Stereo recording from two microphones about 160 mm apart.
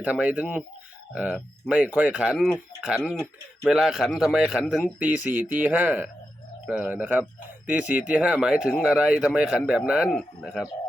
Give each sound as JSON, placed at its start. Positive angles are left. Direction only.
{"t": 0.0, "sound": "speech", "side_deg": -10}
{"t": 4.9, "sound": "speech", "side_deg": -10}